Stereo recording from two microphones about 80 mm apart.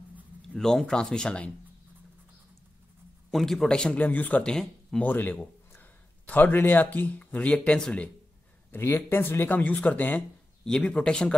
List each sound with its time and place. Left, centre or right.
0.6 s speech: centre
3.3 s speech: centre
5.0 s a man's voice: left
8.7 s speech: left
10.6 s speech: centre